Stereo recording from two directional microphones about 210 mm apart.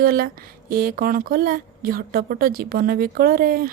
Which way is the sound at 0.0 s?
45° right (ahead or behind).